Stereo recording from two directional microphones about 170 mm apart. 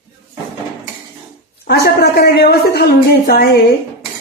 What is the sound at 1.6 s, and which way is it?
A woman's voice, 70° left (ahead or behind).